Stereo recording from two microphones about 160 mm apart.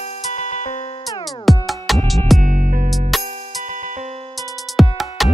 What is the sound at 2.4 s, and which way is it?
Music, 60° right (ahead or behind).